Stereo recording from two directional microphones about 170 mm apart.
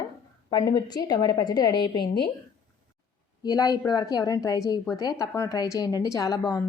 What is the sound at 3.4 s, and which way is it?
A woman's voice, 20° left (ahead or behind).